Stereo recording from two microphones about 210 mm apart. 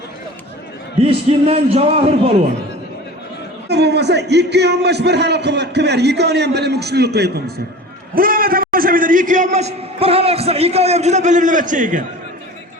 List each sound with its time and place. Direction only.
1.0 s a man's voice: 30° right (ahead or behind)
3.7 s a man's voice: 55° right (ahead or behind); by 12.0 s 40° right (ahead or behind)